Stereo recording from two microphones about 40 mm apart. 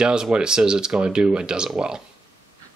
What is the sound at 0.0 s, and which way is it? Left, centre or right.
Speech, right.